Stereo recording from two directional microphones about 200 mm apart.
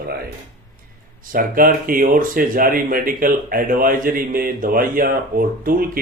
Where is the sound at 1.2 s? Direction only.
45° right (ahead or behind).